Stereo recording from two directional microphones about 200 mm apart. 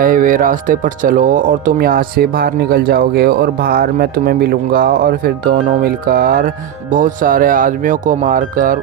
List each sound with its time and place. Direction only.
0.0 s speech: 45° right (ahead or behind)